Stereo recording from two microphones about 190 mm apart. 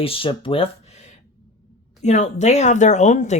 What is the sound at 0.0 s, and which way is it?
Speech, 30° left (ahead or behind).